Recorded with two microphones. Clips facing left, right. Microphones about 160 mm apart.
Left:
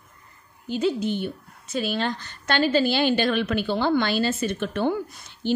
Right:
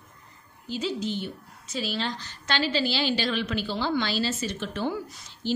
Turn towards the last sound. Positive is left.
turn(degrees=55)  # may be behind; listen again after turning